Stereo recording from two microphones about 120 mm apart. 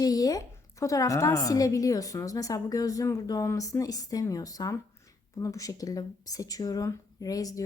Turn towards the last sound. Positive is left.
turn(degrees=30)  # may be behind; listen again after turning